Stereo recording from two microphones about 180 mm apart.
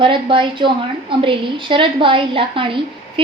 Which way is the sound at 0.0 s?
30° right (ahead or behind).